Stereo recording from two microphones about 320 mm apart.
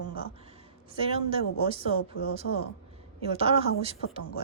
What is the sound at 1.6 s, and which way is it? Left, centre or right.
Speech, centre.